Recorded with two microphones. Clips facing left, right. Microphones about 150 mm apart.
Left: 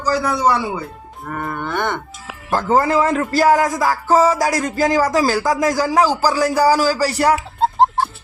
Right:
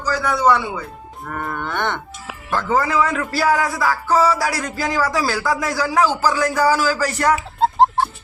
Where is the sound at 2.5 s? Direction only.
40° left (ahead or behind).